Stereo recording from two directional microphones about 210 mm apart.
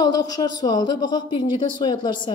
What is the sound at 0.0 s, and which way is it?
A woman's voice, 20° left (ahead or behind).